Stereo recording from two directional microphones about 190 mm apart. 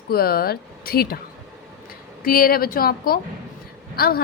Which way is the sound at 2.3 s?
50° left (ahead or behind).